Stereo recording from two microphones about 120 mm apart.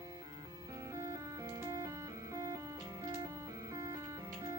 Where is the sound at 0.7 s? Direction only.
25° right (ahead or behind).